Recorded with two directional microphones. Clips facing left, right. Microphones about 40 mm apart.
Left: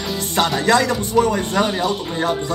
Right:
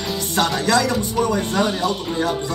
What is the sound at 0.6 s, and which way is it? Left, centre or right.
Speech, left.